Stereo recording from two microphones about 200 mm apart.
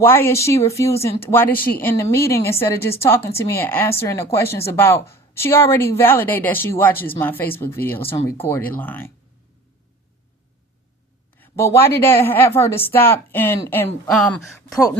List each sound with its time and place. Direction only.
0.0 s a woman's voice: 10° left (ahead or behind)
1.5 s speech: 45° left (ahead or behind)
1.8 s a woman's voice: 15° left (ahead or behind)
11.3 s a woman's voice: 15° left (ahead or behind)
14.5 s speech: 15° left (ahead or behind)